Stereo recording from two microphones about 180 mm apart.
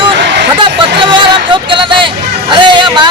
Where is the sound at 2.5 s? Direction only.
25° right (ahead or behind).